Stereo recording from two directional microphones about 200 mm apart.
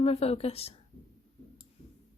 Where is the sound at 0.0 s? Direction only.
30° left (ahead or behind).